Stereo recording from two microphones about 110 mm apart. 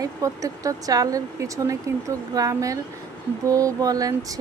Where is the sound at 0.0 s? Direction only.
30° right (ahead or behind).